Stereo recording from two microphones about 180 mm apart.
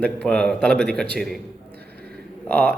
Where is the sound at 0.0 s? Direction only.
5° left (ahead or behind).